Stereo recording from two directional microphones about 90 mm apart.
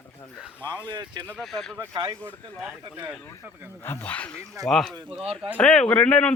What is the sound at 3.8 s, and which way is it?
Speech, 20° left (ahead or behind).